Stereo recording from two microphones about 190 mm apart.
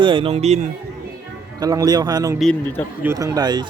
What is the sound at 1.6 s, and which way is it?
Speech, 20° right (ahead or behind).